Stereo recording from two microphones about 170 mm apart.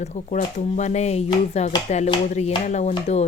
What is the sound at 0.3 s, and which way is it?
Speech, 45° left (ahead or behind).